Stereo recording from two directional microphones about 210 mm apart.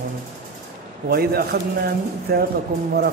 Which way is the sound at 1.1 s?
45° right (ahead or behind).